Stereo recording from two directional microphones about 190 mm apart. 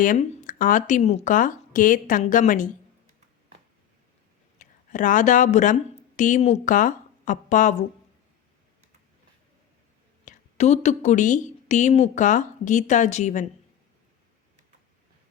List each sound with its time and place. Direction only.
0.0 s speech: 45° left (ahead or behind)
4.5 s a woman's voice: 40° left (ahead or behind)
10.2 s a woman's voice: 35° left (ahead or behind)